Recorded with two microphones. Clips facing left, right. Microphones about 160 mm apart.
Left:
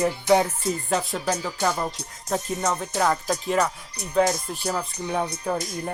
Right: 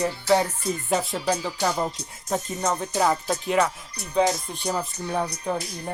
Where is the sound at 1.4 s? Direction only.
10° right (ahead or behind).